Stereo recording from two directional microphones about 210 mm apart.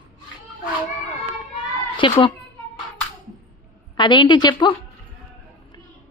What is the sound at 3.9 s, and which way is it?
Speech, 20° left (ahead or behind).